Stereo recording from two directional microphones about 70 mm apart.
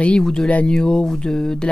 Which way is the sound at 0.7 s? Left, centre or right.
Centre.